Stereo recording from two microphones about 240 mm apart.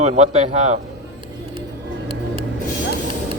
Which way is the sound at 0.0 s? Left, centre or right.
Right.